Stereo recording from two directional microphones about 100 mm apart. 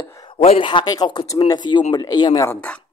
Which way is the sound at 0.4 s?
90° left.